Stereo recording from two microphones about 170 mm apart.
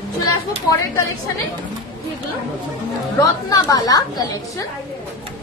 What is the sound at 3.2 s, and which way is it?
Speech, 20° left (ahead or behind).